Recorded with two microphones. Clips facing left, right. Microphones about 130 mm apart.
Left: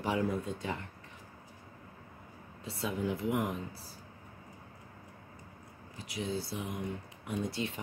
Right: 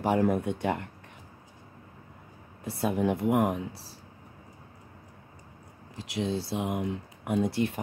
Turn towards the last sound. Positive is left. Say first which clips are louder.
# right 8 dB
turn(degrees=-60)  # may be behind; listen again after turning